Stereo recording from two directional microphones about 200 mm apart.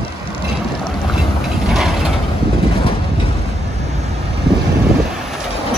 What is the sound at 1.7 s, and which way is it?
Mechanisms, centre (ahead or behind).